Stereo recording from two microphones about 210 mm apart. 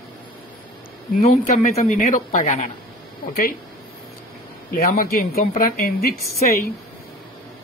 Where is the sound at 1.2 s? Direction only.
40° left (ahead or behind).